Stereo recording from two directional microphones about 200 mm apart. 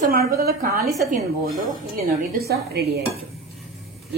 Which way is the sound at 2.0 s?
50° right (ahead or behind).